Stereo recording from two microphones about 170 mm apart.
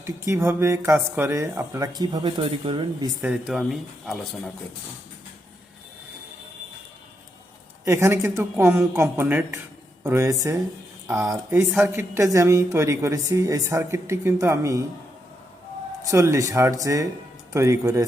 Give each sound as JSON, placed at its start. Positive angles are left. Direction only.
{"t": 0.0, "sound": "speech", "side_deg": -15}
{"t": 3.2, "sound": "speech", "side_deg": -5}
{"t": 7.9, "sound": "a woman's voice", "side_deg": -15}
{"t": 16.0, "sound": "a woman's voice", "side_deg": -20}